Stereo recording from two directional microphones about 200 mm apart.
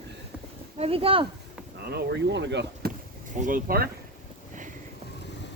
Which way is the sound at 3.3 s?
40° right (ahead or behind).